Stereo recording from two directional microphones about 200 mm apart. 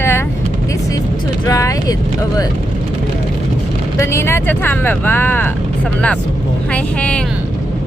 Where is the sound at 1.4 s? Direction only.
15° left (ahead or behind).